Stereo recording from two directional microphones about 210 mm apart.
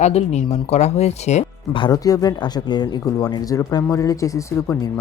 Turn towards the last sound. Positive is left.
turn(degrees=15)  # may be behind; listen again after turning